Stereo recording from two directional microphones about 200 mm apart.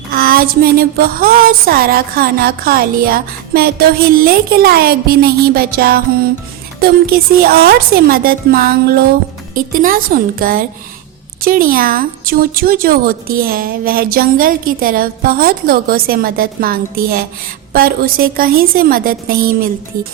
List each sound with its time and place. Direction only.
0.1 s speech: 45° right (ahead or behind)